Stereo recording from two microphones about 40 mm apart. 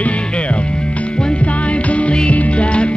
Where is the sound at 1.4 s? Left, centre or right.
Left.